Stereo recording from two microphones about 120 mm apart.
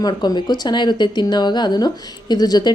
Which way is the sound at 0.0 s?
35° left (ahead or behind).